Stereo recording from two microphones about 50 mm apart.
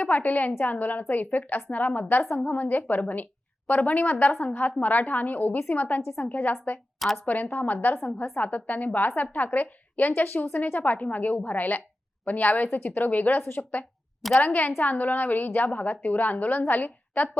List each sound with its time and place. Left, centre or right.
0.0 s a woman's voice: left
13.6 s a woman's voice: left